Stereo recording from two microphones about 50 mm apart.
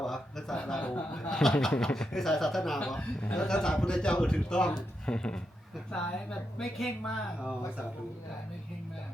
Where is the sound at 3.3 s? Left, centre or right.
Centre.